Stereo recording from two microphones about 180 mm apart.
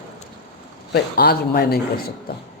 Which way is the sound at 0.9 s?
60° left (ahead or behind).